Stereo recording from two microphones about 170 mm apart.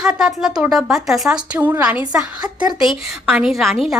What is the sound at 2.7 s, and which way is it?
A woman's voice, centre (ahead or behind).